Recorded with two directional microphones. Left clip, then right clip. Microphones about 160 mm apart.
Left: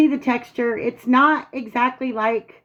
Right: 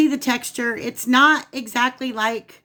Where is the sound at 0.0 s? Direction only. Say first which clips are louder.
Left 1 dB; 20° right (ahead or behind).